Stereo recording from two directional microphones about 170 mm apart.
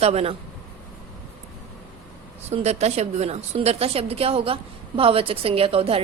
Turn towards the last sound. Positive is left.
turn(degrees=-35)  # may be behind; listen again after turning